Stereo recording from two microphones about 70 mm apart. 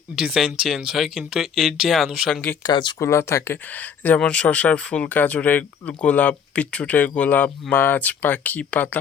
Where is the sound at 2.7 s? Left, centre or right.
Left.